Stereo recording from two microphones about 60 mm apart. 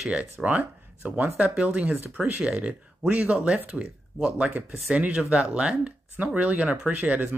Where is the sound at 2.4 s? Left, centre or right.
Centre.